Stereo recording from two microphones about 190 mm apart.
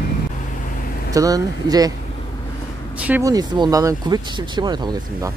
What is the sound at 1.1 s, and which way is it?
Speech, 20° right (ahead or behind).